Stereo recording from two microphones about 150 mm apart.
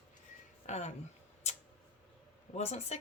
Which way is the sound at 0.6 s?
50° left (ahead or behind).